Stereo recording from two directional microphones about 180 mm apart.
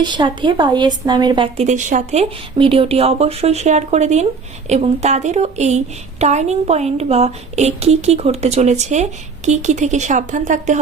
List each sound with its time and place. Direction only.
0.0 s a woman's voice: 25° right (ahead or behind)
1.6 s a woman's voice: 40° right (ahead or behind)